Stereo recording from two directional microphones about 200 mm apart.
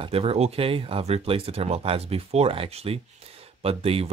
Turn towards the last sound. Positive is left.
turn(degrees=-30)  # may be behind; listen again after turning